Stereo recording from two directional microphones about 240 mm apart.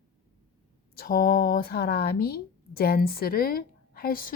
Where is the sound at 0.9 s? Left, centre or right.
Left.